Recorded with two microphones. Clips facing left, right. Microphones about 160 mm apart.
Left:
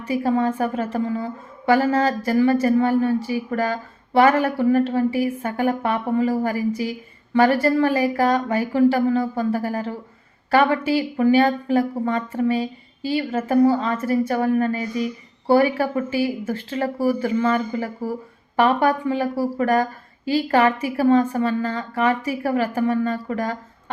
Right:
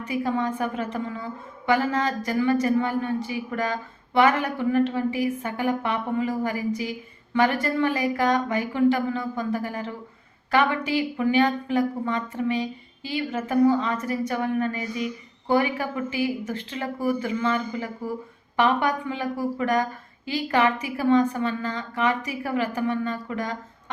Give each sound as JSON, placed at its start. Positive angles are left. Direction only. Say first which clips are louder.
{"t": 0.1, "sound": "speech", "louder": "left 5 dB", "side_deg": 35}